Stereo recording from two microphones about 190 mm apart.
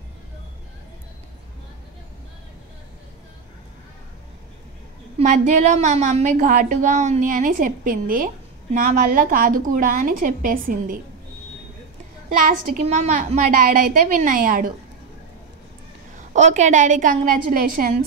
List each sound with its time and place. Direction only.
5.2 s a woman's voice: 40° right (ahead or behind)
12.3 s a woman's voice: 45° right (ahead or behind)
12.8 s a woman's voice: 35° right (ahead or behind)
16.3 s a woman's voice: 40° right (ahead or behind)